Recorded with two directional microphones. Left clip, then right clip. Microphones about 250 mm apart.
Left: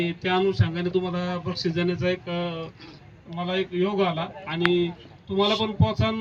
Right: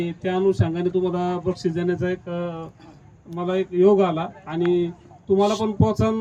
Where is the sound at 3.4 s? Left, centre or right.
Right.